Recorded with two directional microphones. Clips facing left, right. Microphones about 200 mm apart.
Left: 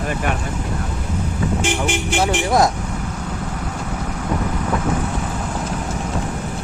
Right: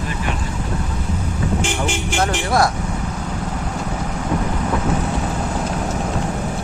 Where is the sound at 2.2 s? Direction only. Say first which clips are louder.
Left 1 dB; 15° left (ahead or behind).